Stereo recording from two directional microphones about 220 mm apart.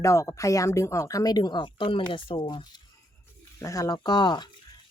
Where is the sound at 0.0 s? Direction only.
15° left (ahead or behind).